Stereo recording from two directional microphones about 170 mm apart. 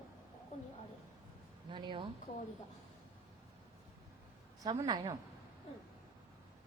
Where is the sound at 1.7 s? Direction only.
30° right (ahead or behind).